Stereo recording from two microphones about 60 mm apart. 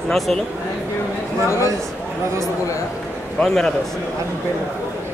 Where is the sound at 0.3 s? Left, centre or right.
Centre.